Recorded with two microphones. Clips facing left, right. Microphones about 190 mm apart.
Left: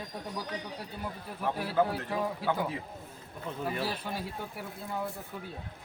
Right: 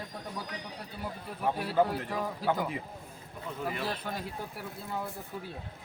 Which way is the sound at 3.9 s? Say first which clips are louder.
Even; 5° left (ahead or behind).